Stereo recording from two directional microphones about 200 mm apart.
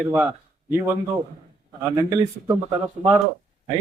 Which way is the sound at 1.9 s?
20° right (ahead or behind).